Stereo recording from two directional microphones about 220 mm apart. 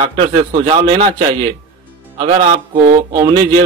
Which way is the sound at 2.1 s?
30° right (ahead or behind).